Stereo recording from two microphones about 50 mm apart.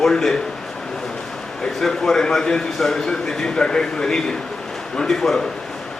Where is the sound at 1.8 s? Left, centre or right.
Centre.